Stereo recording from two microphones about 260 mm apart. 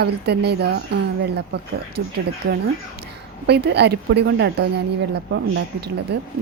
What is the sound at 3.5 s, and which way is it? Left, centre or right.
Speech, right.